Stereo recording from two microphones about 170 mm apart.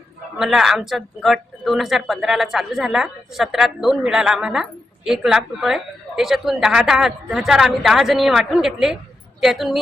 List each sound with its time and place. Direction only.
0.3 s speech: centre (ahead or behind)